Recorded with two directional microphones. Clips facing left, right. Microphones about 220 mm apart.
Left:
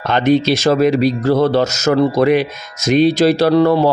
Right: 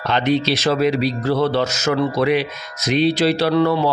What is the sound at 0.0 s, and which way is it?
Speech, 45° left (ahead or behind).